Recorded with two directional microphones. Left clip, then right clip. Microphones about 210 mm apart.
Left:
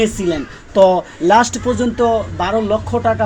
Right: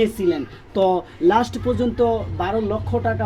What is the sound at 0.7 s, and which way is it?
Speech, 5° right (ahead or behind).